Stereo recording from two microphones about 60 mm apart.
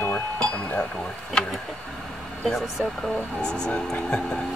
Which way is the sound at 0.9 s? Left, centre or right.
Centre.